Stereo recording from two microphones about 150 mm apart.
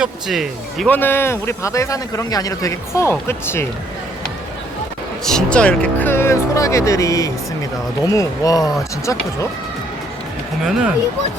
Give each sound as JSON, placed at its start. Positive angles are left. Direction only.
{"t": 0.0, "sound": "speech", "side_deg": 0}
{"t": 0.9, "sound": "a man's voice", "side_deg": 15}
{"t": 5.2, "sound": "a man's voice", "side_deg": 5}
{"t": 10.7, "sound": "speech", "side_deg": -5}